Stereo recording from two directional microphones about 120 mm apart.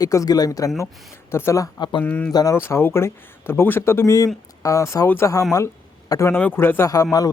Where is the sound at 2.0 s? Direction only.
15° left (ahead or behind).